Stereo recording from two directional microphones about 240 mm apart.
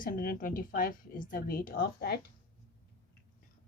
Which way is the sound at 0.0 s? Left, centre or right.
Left.